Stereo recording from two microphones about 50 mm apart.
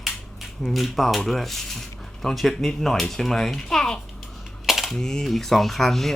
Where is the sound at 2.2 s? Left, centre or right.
Centre.